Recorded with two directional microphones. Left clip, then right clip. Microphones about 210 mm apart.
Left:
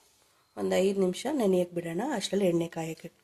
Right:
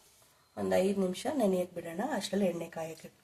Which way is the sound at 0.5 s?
45° left (ahead or behind).